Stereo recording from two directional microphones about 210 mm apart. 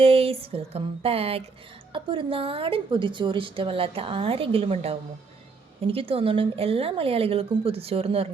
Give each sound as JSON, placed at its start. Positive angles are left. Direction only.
{"t": 0.0, "sound": "a woman's voice", "side_deg": -30}